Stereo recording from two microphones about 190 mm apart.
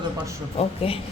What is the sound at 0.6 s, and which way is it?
Speech, 30° left (ahead or behind).